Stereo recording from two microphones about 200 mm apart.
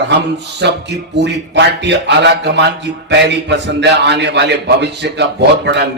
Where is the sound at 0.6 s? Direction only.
60° right (ahead or behind).